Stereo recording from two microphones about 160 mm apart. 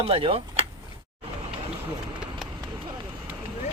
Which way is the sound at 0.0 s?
35° right (ahead or behind).